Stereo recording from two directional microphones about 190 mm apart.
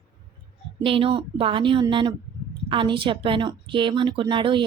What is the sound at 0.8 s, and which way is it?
A woman's voice, 30° right (ahead or behind).